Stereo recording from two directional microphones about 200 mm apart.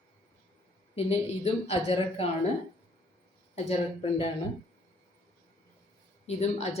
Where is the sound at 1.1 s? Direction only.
30° left (ahead or behind).